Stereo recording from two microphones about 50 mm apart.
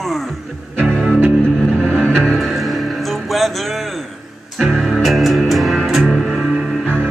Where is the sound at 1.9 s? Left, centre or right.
Right.